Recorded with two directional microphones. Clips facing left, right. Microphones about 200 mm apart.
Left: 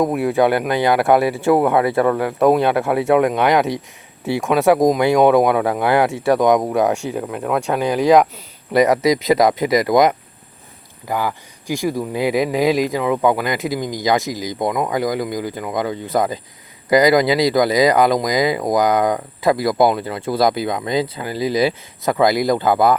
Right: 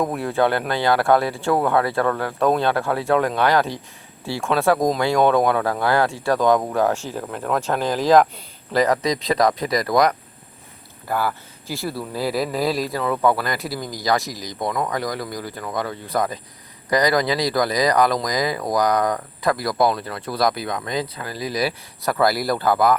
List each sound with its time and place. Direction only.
0.0 s speech: 5° left (ahead or behind); by 23.0 s 25° left (ahead or behind)